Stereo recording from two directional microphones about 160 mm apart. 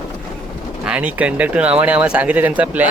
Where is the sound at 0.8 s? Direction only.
5° right (ahead or behind).